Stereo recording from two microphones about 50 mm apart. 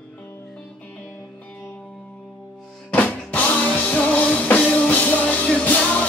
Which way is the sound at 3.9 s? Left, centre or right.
Left.